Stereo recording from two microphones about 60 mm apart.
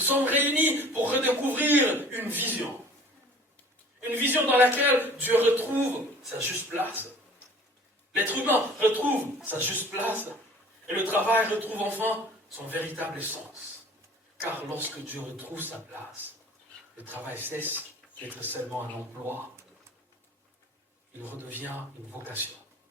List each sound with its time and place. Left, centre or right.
0.0 s a man's voice: right
4.0 s a man's voice: right
8.1 s a man's voice: right
14.7 s a man's voice: right
17.1 s a man's voice: right
21.2 s a man's voice: right